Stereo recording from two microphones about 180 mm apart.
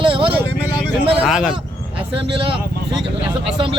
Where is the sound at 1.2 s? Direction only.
5° right (ahead or behind).